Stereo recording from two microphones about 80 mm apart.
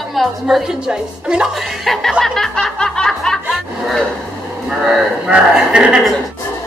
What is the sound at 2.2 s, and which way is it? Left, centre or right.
Snicker, centre.